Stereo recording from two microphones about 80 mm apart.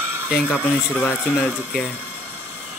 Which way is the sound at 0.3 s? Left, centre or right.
Centre.